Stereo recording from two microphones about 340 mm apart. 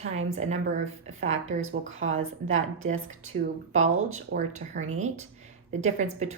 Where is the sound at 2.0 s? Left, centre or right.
Right.